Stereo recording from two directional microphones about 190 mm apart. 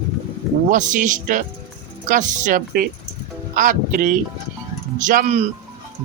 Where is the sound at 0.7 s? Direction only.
45° right (ahead or behind).